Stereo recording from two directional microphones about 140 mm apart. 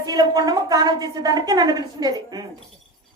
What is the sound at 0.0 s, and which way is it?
A woman's voice, 25° right (ahead or behind).